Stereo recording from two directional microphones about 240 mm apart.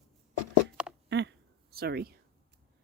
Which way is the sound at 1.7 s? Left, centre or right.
Right.